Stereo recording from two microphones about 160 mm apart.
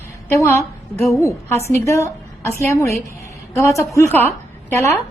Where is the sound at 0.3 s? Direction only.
20° left (ahead or behind).